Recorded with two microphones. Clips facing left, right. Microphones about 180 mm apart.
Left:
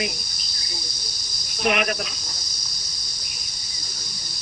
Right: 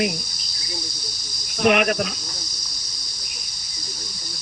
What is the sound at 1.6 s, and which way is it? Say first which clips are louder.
Speech: right 5 dB; 50° right (ahead or behind).